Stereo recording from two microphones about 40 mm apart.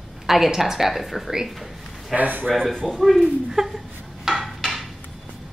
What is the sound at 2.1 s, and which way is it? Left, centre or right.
Speech, right.